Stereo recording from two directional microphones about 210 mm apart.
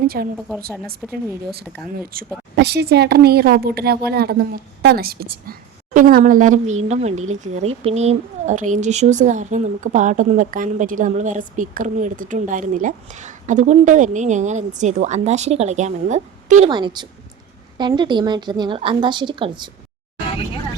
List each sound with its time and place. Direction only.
0.2 s a woman's voice: 50° right (ahead or behind)
2.1 s a woman's voice: 45° right (ahead or behind)
16.6 s a woman's voice: 20° right (ahead or behind)